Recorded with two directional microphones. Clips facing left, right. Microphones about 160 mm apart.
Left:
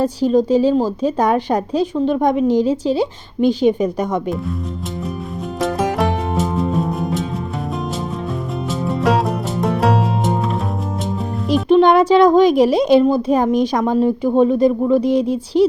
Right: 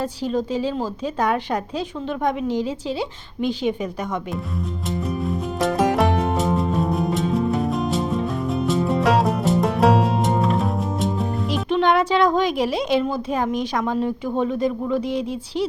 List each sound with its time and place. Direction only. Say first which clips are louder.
0.0 s a woman's voice: left 8 dB; 40° left (ahead or behind)
5.5 s music: left 1 dB; centre (ahead or behind)
8.6 s music: left 1 dB; centre (ahead or behind)
11.7 s a woman's voice: left 8 dB; 40° left (ahead or behind)